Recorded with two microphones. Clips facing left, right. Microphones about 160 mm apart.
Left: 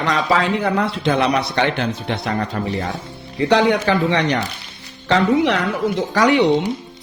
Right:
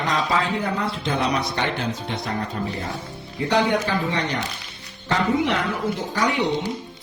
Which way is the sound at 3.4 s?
85° left.